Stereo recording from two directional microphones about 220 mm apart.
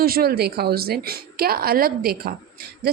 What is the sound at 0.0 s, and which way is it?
A woman's voice, 45° right (ahead or behind).